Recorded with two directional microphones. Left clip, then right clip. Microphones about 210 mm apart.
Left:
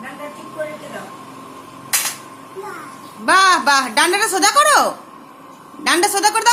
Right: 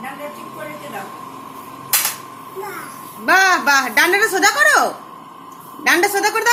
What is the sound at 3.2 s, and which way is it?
A woman's voice, 10° left (ahead or behind).